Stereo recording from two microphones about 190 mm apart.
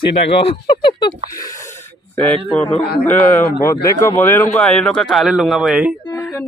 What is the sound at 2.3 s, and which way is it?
A man's voice, 5° left (ahead or behind).